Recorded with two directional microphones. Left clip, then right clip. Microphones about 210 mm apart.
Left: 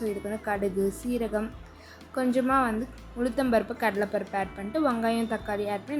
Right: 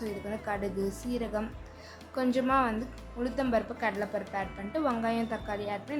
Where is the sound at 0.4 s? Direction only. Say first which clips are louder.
Left 6 dB; 20° left (ahead or behind).